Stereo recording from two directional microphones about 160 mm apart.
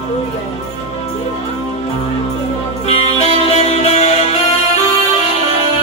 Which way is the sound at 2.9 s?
40° left (ahead or behind).